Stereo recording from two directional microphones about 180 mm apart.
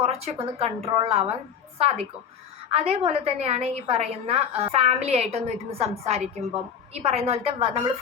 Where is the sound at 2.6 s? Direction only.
35° right (ahead or behind).